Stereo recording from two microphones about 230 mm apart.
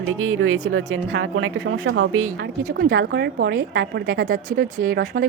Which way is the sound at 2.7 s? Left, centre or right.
Right.